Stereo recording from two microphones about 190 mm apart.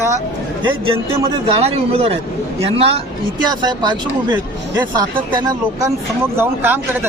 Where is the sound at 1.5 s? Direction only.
30° right (ahead or behind); by 6.8 s 10° right (ahead or behind).